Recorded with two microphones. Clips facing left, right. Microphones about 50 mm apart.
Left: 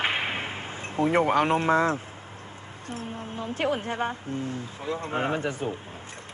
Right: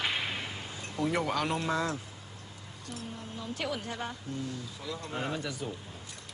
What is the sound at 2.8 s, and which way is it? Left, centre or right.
A woman's voice, left.